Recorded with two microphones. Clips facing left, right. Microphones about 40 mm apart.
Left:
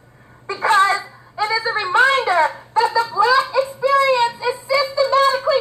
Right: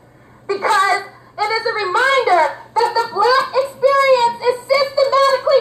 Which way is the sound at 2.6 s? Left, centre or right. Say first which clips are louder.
Right 1 dB; centre.